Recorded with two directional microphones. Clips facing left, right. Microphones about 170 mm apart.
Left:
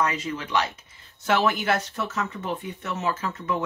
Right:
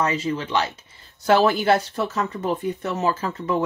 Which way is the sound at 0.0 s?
30° right (ahead or behind).